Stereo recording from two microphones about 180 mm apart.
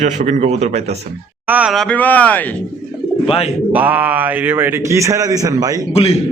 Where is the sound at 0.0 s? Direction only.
40° right (ahead or behind).